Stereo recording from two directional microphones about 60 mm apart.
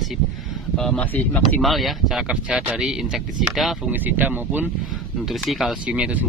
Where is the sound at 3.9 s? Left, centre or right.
Right.